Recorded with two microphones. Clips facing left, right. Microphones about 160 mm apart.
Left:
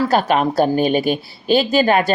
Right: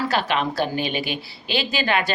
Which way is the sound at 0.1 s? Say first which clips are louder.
Left 7 dB; 45° left (ahead or behind).